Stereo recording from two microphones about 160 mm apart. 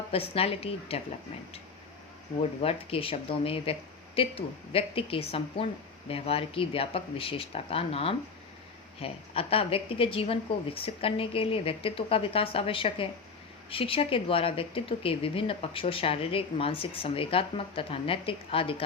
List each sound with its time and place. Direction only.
0.1 s speech: 35° left (ahead or behind)
2.4 s speech: 35° left (ahead or behind)